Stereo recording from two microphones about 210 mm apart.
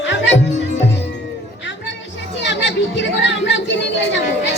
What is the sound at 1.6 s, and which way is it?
Music, 60° left (ahead or behind).